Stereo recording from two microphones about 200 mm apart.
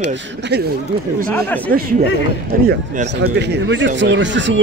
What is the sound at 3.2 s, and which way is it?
Speech, 60° right (ahead or behind).